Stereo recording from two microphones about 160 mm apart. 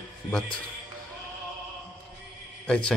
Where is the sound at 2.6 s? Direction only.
5° left (ahead or behind).